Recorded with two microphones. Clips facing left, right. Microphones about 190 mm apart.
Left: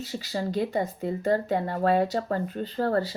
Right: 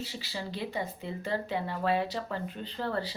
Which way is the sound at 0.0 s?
45° left (ahead or behind).